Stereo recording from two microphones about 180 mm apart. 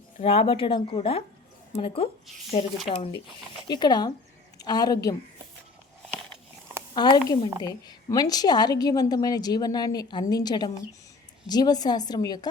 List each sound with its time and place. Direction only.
0.2 s a woman's voice: 35° left (ahead or behind)
6.9 s a woman's voice: 25° left (ahead or behind)